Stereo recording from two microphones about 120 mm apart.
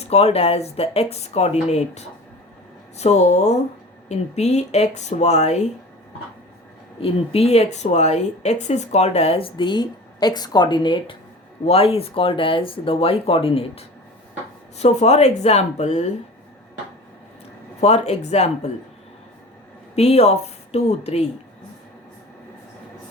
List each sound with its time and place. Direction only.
0.0 s speech: 60° left (ahead or behind)
7.0 s speech: 55° left (ahead or behind)
11.6 s speech: 55° left (ahead or behind)
14.8 s speech: 65° left (ahead or behind)
17.7 s speech: 65° left (ahead or behind)
20.0 s speech: 60° left (ahead or behind)